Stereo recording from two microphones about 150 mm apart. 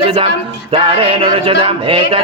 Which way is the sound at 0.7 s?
35° right (ahead or behind).